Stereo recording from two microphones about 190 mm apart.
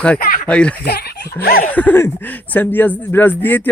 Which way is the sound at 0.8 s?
55° left (ahead or behind).